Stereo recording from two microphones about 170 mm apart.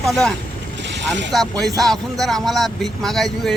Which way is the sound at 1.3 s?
Centre (ahead or behind).